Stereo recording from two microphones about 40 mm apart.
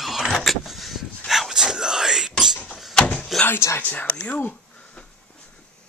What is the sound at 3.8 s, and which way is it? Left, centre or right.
Speech, left.